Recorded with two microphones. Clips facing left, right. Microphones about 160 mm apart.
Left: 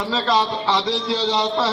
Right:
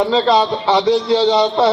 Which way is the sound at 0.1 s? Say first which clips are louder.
Right 6 dB; 30° right (ahead or behind).